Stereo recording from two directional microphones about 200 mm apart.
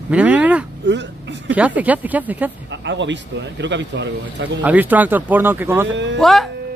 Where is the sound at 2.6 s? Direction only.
65° right (ahead or behind).